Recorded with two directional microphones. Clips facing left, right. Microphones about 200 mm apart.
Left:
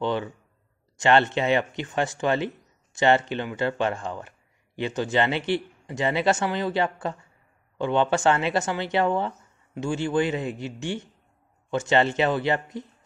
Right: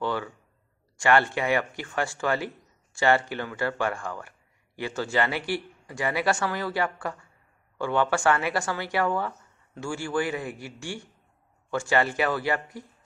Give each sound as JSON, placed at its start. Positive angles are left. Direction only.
{"t": 0.0, "sound": "speech", "side_deg": 20}